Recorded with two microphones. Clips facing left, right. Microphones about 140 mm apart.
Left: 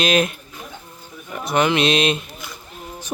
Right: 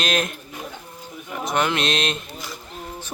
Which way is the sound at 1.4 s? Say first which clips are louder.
Left 4 dB; centre (ahead or behind).